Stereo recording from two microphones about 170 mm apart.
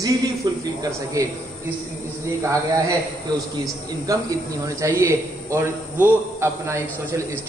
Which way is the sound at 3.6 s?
20° right (ahead or behind).